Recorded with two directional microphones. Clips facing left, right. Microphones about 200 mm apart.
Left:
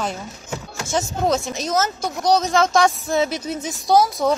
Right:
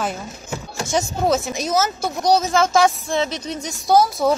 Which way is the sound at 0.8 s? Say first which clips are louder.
Right 1 dB; 10° right (ahead or behind).